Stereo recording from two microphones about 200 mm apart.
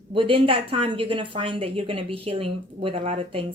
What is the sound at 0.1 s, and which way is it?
A woman's voice, 25° right (ahead or behind).